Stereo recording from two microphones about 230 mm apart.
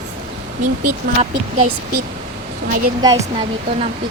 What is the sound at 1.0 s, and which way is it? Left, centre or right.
Speech, right.